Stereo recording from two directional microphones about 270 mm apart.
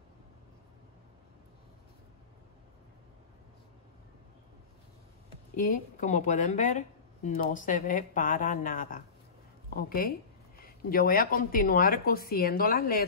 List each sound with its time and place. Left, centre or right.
5.6 s speech: left